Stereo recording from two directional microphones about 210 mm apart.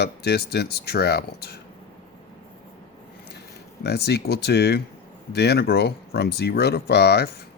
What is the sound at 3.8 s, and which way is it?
Speech, 50° left (ahead or behind).